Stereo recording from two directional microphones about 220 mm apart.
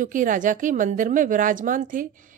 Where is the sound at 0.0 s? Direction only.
35° right (ahead or behind).